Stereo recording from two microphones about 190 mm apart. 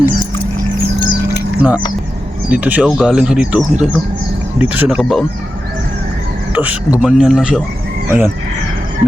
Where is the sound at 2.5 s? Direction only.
10° right (ahead or behind).